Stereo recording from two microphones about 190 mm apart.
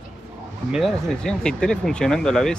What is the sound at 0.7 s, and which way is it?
Speech, centre (ahead or behind).